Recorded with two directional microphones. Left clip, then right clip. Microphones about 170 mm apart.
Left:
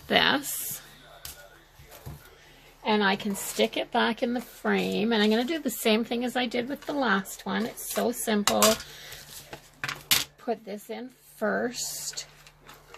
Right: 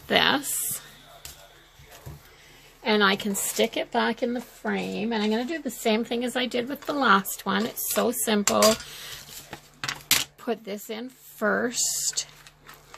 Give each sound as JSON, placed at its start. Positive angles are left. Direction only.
{"t": 0.1, "sound": "speech", "side_deg": -15}
{"t": 2.8, "sound": "speech", "side_deg": -35}
{"t": 4.6, "sound": "speech", "side_deg": 20}
{"t": 5.8, "sound": "speech", "side_deg": 0}
{"t": 10.4, "sound": "speech", "side_deg": -30}